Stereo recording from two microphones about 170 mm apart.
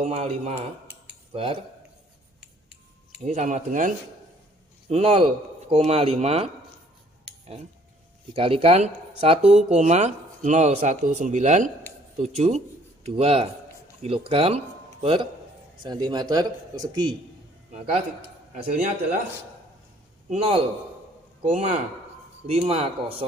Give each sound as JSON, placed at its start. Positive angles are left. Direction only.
{"t": 0.0, "sound": "speech", "side_deg": -35}
{"t": 2.4, "sound": "finger snapping", "side_deg": -80}
{"t": 3.3, "sound": "speech", "side_deg": -45}
{"t": 4.8, "sound": "a man's voice", "side_deg": -35}
{"t": 8.3, "sound": "speech", "side_deg": -35}
{"t": 15.8, "sound": "a man's voice", "side_deg": -25}
{"t": 18.5, "sound": "speech", "side_deg": -50}
{"t": 20.2, "sound": "speech", "side_deg": -40}